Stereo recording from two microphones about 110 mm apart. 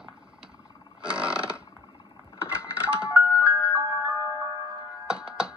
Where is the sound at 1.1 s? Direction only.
10° right (ahead or behind).